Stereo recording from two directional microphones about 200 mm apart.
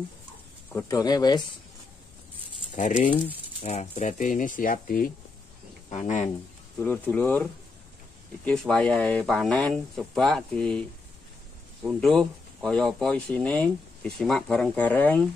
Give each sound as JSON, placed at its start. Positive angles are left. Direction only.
{"t": 0.7, "sound": "speech", "side_deg": 15}
{"t": 3.0, "sound": "speech", "side_deg": 40}
{"t": 6.8, "sound": "speech", "side_deg": 5}
{"t": 8.5, "sound": "speech", "side_deg": 5}